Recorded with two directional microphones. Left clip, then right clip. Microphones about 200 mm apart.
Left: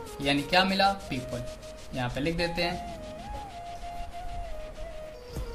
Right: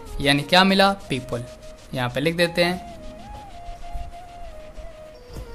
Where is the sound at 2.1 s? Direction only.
55° right (ahead or behind).